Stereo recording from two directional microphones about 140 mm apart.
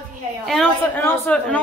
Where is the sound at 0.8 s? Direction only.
15° left (ahead or behind).